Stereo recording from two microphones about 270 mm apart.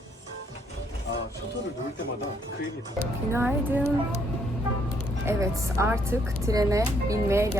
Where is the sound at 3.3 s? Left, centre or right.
Centre.